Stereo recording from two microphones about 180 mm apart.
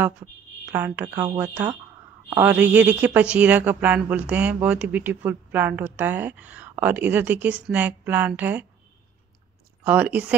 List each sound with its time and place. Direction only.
0.7 s speech: 10° right (ahead or behind)
1.0 s speech: 20° right (ahead or behind)
9.8 s speech: 10° right (ahead or behind)